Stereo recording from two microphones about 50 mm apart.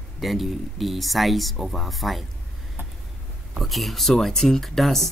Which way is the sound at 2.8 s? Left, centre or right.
Right.